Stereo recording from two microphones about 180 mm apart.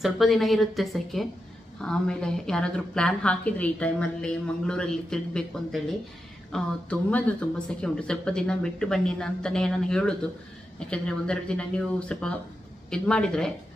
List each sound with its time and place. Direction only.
0.0 s a woman's voice: centre (ahead or behind)